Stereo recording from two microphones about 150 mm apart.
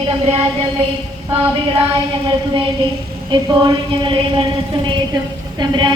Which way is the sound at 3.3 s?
30° right (ahead or behind).